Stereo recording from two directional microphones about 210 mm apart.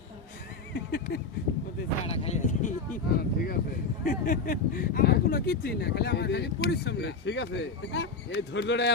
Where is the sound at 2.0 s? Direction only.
30° left (ahead or behind).